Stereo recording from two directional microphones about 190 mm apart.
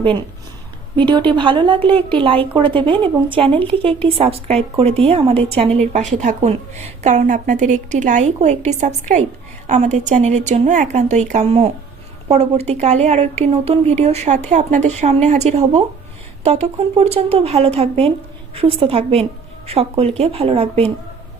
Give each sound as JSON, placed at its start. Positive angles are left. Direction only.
{"t": 0.9, "sound": "a woman's voice", "side_deg": -25}